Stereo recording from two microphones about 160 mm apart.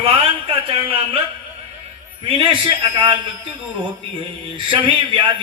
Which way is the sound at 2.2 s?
35° right (ahead or behind).